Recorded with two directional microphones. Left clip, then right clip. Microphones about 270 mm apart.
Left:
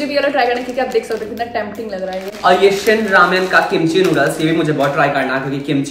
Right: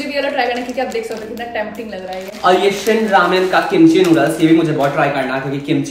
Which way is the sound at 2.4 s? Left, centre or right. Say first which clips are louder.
Left 2 dB; centre.